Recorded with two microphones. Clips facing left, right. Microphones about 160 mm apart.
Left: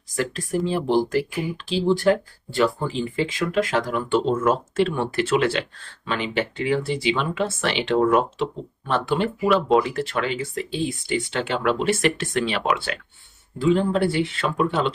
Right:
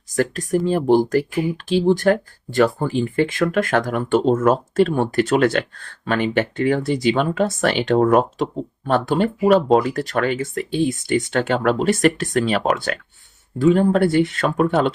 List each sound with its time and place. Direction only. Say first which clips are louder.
0.2 s speech: right 5 dB; 50° right (ahead or behind)